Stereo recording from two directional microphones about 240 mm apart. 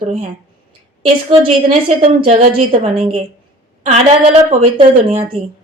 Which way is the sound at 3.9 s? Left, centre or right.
Right.